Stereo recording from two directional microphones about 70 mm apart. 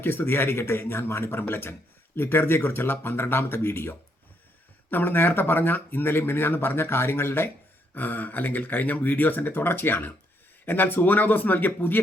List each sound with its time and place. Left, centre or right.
0.0 s speech: left